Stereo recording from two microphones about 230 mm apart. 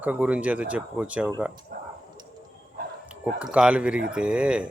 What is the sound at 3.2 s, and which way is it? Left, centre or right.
Speech, centre.